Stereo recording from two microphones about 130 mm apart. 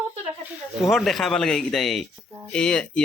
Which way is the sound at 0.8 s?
Centre (ahead or behind).